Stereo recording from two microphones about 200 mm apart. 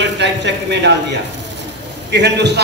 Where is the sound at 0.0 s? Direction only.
60° right (ahead or behind).